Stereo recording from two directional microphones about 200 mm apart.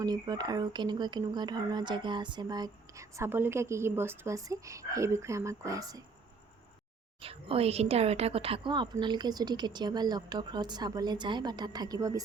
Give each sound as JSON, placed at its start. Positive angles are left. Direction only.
{"t": 0.0, "sound": "speech", "side_deg": -20}
{"t": 7.2, "sound": "speech", "side_deg": -30}